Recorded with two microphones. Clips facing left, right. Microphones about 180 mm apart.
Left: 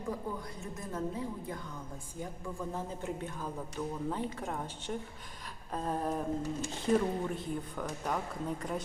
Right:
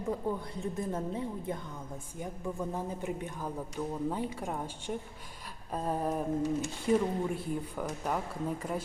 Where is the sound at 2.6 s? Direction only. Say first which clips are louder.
Right 1 dB; 15° right (ahead or behind).